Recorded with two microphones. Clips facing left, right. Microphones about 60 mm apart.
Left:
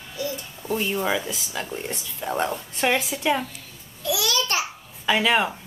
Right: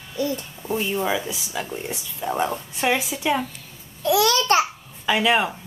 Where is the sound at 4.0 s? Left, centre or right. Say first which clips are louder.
Right 6 dB; right.